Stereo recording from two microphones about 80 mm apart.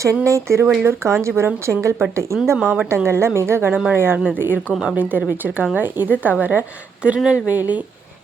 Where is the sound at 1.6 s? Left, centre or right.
Right.